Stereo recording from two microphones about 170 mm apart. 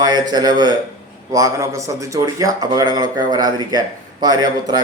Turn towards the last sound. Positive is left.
turn(degrees=-25)  # may be behind; listen again after turning